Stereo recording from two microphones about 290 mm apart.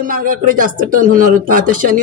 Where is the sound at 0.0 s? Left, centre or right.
Right.